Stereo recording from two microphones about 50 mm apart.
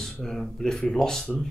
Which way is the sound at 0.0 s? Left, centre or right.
Centre.